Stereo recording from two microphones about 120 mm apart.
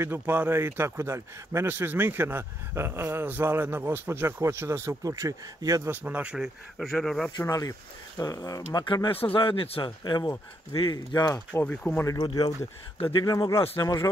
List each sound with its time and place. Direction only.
0.0 s a man's voice: 20° right (ahead or behind)
5.9 s speech: 15° right (ahead or behind); by 7.3 s 5° left (ahead or behind)
7.3 s speech: 30° left (ahead or behind)
11.6 s speech: 10° left (ahead or behind)
12.1 s speech: 30° left (ahead or behind)